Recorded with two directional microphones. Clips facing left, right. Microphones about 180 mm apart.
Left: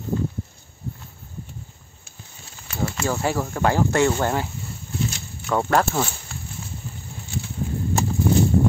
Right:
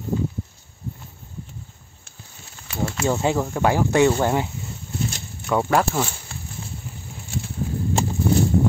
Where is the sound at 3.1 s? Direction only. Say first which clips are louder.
Right 4 dB; 20° right (ahead or behind).